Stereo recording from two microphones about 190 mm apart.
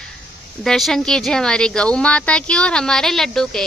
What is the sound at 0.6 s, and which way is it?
A woman's voice, centre (ahead or behind).